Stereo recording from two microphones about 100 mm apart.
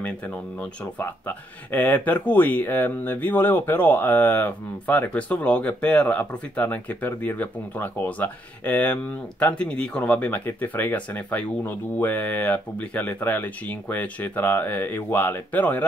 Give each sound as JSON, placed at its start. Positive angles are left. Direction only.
{"t": 0.6, "sound": "speech", "side_deg": 15}